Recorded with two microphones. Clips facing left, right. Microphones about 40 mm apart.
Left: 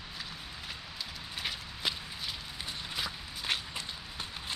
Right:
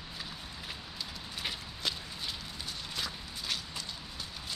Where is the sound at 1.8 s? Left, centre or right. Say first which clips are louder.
Left 1 dB; centre.